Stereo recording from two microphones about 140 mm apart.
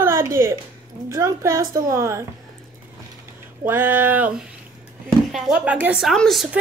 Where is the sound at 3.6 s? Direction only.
15° right (ahead or behind).